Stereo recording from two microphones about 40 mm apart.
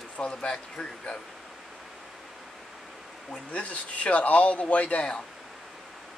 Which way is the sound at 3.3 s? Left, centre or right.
Left.